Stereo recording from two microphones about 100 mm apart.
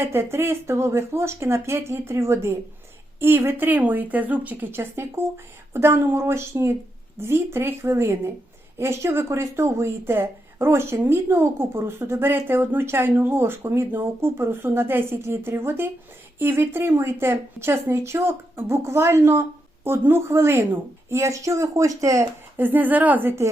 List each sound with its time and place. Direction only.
0.0 s speech: 25° right (ahead or behind)
22.5 s a woman's voice: 20° right (ahead or behind)